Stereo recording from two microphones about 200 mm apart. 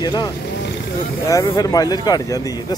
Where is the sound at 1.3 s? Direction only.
15° left (ahead or behind).